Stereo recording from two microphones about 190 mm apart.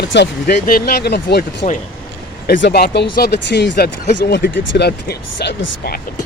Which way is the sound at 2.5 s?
60° left (ahead or behind).